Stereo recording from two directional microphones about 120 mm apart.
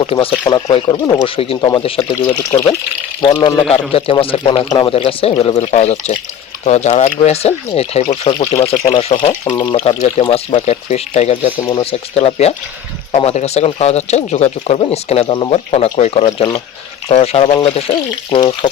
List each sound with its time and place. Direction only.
0.0 s speech: 50° left (ahead or behind)
2.2 s speech: 25° left (ahead or behind)
3.2 s speech: 40° left (ahead or behind)
5.5 s speech: 70° left (ahead or behind)
9.4 s speech: 35° left (ahead or behind)
9.7 s speech: 60° left (ahead or behind)
11.7 s speech: 55° left (ahead or behind)